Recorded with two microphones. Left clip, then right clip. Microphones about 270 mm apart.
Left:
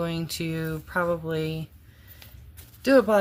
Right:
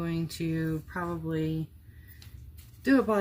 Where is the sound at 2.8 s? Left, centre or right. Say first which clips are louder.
Left 7 dB; left.